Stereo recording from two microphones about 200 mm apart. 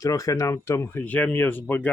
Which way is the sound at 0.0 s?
15° left (ahead or behind).